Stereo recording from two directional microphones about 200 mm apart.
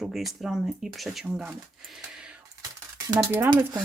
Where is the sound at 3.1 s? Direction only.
15° right (ahead or behind).